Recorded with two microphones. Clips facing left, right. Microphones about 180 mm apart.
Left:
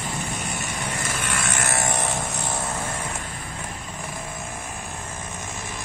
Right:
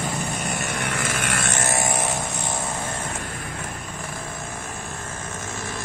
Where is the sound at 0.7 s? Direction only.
70° right (ahead or behind); by 1.4 s 85° right.